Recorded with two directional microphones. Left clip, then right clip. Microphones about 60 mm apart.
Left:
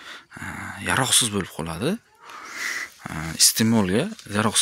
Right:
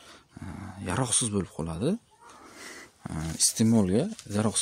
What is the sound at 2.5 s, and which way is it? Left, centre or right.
Dog, right.